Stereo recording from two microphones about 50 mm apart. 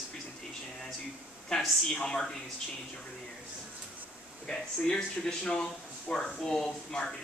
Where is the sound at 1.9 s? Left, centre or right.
Centre.